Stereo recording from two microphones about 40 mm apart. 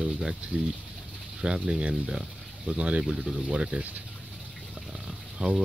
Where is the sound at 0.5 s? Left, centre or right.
Right.